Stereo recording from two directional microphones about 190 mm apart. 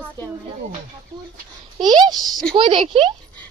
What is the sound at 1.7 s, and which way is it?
A woman's voice, 20° right (ahead or behind).